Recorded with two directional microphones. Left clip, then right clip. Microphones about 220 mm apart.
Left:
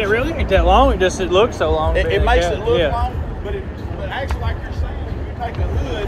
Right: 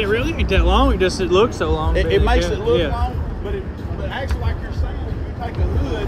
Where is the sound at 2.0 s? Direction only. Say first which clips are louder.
Right 1 dB; 45° right (ahead or behind).